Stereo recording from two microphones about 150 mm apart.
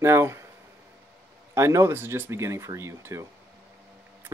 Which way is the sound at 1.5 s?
20° right (ahead or behind).